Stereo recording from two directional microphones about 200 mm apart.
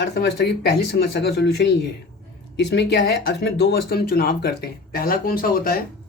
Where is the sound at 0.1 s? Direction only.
55° left (ahead or behind).